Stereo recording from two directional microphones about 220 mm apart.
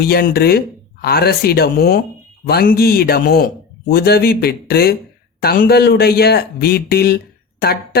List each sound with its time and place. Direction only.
0.0 s a man's voice: 45° left (ahead or behind)